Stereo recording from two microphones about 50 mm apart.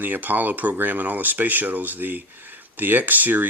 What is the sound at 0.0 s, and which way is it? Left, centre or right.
Speech, right.